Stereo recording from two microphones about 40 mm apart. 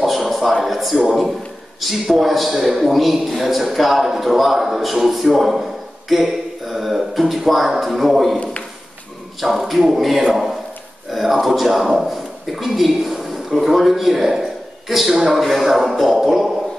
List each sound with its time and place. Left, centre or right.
0.0 s a man's voice: centre
9.4 s a man's voice: centre